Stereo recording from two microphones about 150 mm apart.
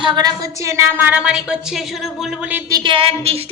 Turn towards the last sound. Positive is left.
turn(degrees=-40)  # may be behind; listen again after turning